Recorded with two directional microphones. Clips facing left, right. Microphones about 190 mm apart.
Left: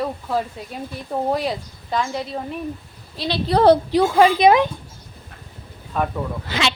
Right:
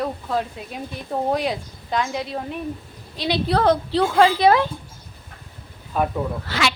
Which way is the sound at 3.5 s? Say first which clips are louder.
Left 4 dB; centre (ahead or behind).